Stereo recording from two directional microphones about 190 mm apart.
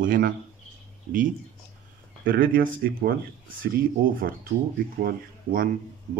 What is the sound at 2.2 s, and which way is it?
Speech, 50° right (ahead or behind).